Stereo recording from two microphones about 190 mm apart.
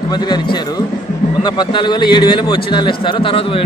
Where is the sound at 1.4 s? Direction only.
25° left (ahead or behind).